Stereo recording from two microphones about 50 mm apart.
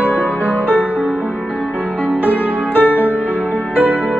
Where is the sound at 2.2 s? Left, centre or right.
Left.